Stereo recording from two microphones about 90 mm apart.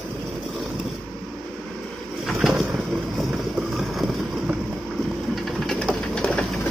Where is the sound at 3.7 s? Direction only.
Centre (ahead or behind).